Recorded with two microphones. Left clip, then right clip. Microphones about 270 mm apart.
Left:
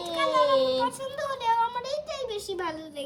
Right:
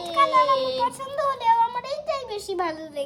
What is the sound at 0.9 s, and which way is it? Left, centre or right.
A woman's voice, right.